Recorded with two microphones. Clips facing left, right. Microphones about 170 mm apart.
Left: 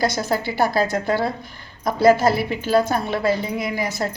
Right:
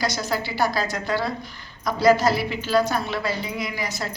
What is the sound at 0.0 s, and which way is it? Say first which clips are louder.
A woman's voice: left 4 dB; 55° left (ahead or behind).